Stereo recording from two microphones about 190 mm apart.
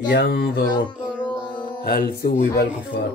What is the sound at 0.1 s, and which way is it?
Speech, 60° left (ahead or behind).